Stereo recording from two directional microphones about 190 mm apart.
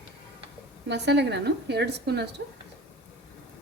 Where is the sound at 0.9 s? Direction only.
65° right (ahead or behind).